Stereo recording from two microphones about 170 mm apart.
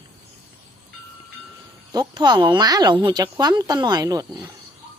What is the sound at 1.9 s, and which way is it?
Speech, 25° right (ahead or behind).